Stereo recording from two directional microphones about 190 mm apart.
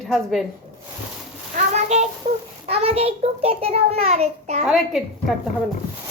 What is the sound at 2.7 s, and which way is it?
A child's voice, 30° right (ahead or behind).